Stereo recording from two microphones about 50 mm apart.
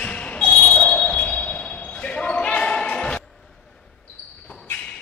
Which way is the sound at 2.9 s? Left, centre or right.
Left.